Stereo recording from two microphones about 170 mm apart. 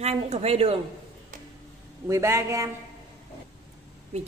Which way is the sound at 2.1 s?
15° right (ahead or behind).